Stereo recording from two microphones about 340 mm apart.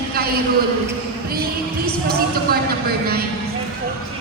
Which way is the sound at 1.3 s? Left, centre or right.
Right.